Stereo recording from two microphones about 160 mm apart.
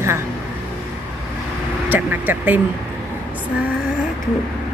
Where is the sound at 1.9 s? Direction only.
10° right (ahead or behind).